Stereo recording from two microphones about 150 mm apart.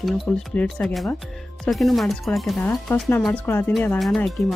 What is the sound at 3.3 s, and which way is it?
Speech, 15° left (ahead or behind).